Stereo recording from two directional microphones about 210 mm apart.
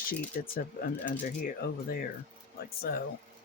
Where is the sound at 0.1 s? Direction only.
45° left (ahead or behind).